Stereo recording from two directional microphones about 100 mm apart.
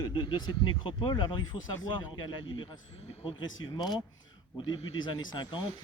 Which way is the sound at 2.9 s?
90° left.